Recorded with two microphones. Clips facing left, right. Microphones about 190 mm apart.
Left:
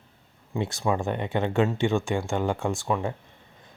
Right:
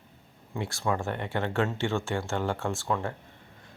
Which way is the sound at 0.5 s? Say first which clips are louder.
Left 4 dB; 20° left (ahead or behind).